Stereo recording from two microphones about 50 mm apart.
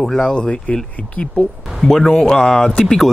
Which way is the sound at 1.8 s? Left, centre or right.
Centre.